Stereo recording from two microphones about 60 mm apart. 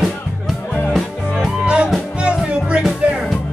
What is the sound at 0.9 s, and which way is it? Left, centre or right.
Music, centre.